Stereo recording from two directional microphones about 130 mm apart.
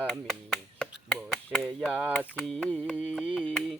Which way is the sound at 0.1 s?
5° left (ahead or behind).